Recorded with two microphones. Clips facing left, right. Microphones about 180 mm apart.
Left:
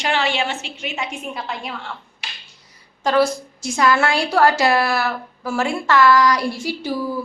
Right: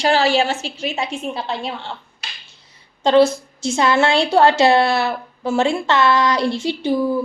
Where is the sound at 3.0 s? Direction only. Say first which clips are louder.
Right 4 dB; 25° right (ahead or behind).